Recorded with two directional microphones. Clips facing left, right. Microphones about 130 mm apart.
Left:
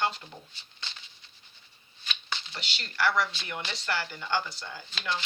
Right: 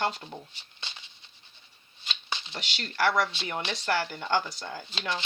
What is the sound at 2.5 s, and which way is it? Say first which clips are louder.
Speech: right 3 dB; 45° right (ahead or behind).